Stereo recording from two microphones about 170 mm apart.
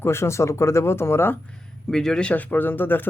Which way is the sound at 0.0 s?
15° left (ahead or behind).